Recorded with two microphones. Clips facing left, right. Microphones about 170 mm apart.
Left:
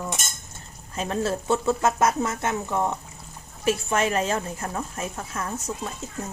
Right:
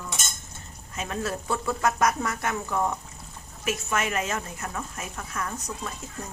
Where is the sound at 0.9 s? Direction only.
35° left (ahead or behind).